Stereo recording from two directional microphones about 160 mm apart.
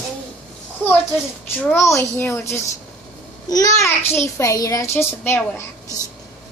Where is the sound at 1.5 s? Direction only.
15° left (ahead or behind).